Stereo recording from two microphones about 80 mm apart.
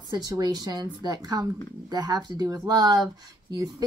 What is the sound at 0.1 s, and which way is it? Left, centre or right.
A woman's voice, right.